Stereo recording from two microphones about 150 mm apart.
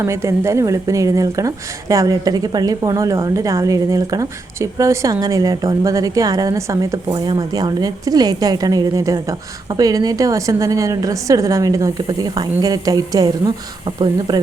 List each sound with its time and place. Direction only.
0.0 s a woman's voice: 20° right (ahead or behind)